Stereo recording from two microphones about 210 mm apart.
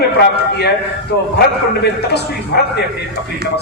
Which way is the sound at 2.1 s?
50° left (ahead or behind).